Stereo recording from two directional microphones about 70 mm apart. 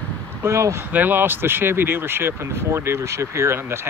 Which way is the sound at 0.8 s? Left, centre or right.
Right.